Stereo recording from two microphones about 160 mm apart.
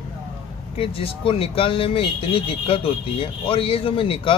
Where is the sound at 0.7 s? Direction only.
35° left (ahead or behind).